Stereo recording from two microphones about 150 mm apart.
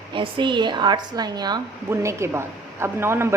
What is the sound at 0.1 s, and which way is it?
A woman's voice, 30° right (ahead or behind).